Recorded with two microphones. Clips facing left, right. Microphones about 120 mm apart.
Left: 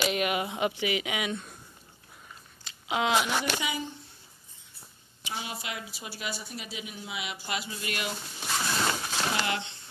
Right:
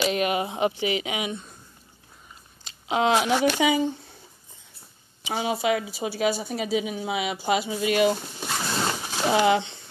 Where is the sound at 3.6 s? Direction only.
90° right.